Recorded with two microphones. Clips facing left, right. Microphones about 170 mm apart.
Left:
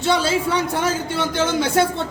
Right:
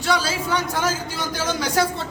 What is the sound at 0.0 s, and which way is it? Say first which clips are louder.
A man's voice: left 4 dB; 25° left (ahead or behind).